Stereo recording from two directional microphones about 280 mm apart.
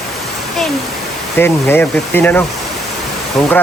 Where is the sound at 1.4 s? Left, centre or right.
Centre.